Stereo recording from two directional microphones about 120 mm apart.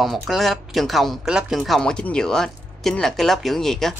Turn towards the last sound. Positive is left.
turn(degrees=5)  # may be behind; listen again after turning